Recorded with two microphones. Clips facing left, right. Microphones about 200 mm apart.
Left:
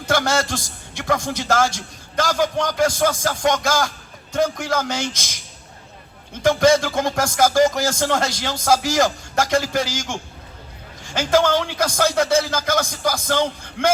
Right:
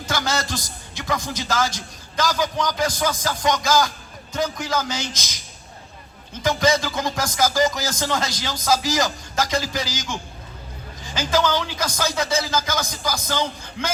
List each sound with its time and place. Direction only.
0.0 s a man's voice: 60° left (ahead or behind)
6.4 s a man's voice: 60° left (ahead or behind)